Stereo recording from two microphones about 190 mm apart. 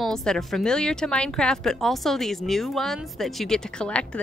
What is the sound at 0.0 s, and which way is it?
A woman's voice, 5° left (ahead or behind).